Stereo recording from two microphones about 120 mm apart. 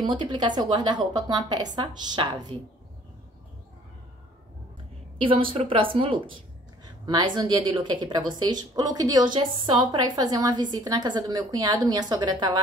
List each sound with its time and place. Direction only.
0.0 s a woman's voice: 40° right (ahead or behind)
5.2 s a woman's voice: 45° right (ahead or behind)
6.8 s a woman's voice: 35° right (ahead or behind)